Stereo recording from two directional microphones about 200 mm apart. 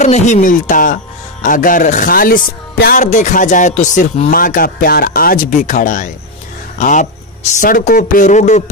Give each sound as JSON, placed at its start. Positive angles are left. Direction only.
{"t": 0.0, "sound": "a man's voice", "side_deg": 35}